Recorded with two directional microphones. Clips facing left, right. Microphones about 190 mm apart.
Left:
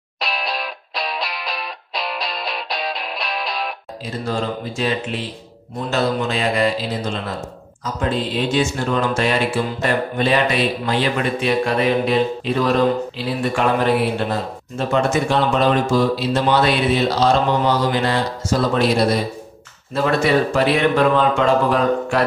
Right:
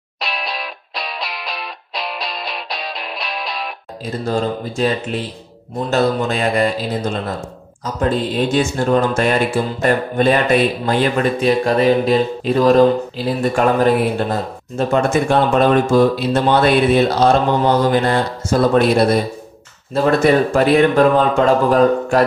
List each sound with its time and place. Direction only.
0.2 s music: centre (ahead or behind)
4.0 s music: 45° right (ahead or behind)
19.9 s music: 45° right (ahead or behind)